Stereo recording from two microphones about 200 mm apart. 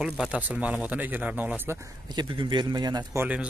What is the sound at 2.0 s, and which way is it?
Speech, 25° right (ahead or behind).